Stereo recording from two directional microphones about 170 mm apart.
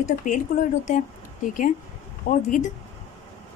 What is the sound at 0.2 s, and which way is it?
Speech, 50° left (ahead or behind).